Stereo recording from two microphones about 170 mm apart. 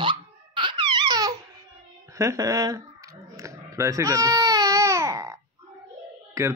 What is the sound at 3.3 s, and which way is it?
Baby cry, 20° right (ahead or behind).